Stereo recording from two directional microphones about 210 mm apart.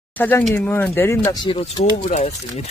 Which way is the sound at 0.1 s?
10° left (ahead or behind).